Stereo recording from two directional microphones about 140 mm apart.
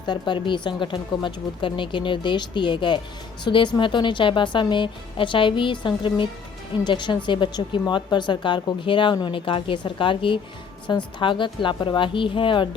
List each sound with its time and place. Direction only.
0.0 s a woman's voice: 35° left (ahead or behind)